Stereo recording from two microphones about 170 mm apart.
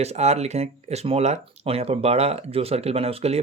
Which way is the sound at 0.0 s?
40° right (ahead or behind).